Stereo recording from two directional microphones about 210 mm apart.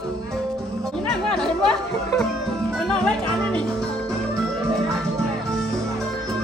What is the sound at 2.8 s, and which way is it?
Music, 5° left (ahead or behind).